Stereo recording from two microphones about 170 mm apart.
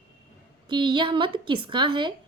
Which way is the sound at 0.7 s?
25° right (ahead or behind).